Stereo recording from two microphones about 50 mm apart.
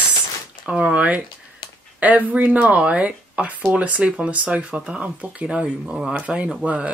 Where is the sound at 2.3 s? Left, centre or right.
Right.